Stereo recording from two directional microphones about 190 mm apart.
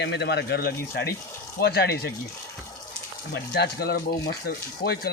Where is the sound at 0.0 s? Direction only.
65° left (ahead or behind).